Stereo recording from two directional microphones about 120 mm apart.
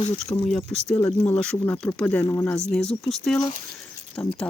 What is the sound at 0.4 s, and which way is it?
Speech, 5° left (ahead or behind).